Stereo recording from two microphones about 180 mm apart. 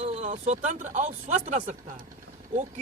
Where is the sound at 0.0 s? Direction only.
40° right (ahead or behind).